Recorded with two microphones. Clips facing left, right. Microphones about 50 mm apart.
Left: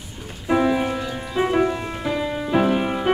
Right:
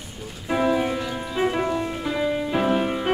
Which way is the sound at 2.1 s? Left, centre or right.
Centre.